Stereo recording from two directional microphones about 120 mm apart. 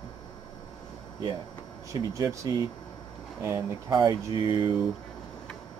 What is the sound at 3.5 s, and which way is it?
Speech, 30° right (ahead or behind).